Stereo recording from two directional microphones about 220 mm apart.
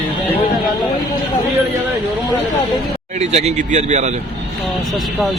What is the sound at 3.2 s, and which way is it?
Speech, 30° right (ahead or behind).